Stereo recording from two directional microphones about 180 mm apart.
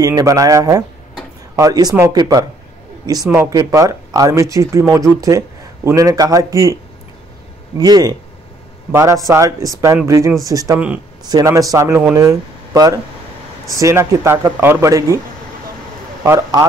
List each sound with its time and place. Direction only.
0.0 s speech: 20° right (ahead or behind)
16.3 s speech: 15° right (ahead or behind)